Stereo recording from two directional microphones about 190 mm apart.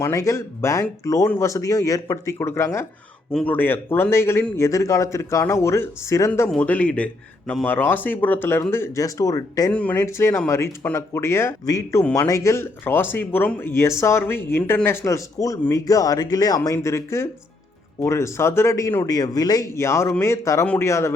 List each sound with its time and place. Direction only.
0.0 s speech: 15° left (ahead or behind)